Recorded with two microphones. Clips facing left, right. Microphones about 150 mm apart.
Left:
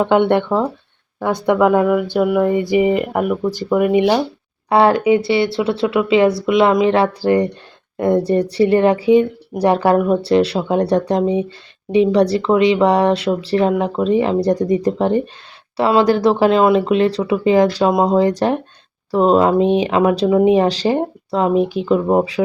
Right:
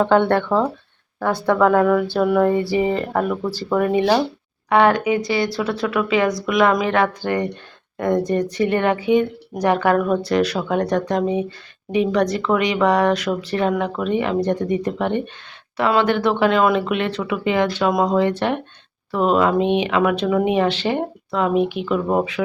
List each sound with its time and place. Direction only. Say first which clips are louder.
0.0 s speech: left 2 dB; 15° left (ahead or behind)
4.7 s speech: left 3 dB; 30° left (ahead or behind)